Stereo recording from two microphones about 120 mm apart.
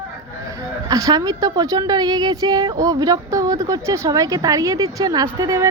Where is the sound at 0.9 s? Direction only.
30° right (ahead or behind).